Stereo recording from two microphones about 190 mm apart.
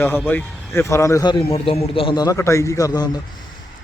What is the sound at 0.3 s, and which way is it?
A man's voice, 10° left (ahead or behind).